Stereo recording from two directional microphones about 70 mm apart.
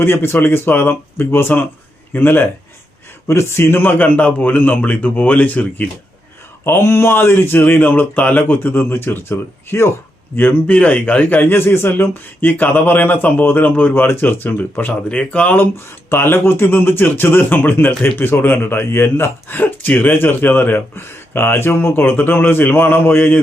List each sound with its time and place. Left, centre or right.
0.0 s a man's voice: left
3.2 s a man's voice: left
6.7 s speech: left
10.3 s a man's voice: left
15.1 s a man's voice: centre
15.7 s speech: left